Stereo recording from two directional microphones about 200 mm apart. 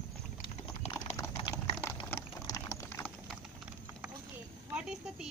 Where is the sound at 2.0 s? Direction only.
15° left (ahead or behind).